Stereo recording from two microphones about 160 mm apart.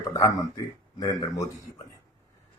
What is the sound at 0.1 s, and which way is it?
Speech, 25° left (ahead or behind).